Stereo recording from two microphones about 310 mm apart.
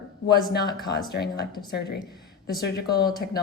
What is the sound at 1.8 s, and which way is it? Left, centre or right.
Speech, left.